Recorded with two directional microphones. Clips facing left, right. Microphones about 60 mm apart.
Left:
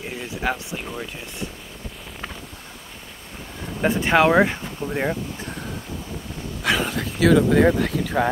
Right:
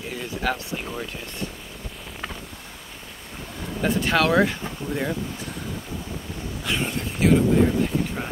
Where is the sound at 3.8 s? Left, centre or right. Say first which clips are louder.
Left 4 dB; left.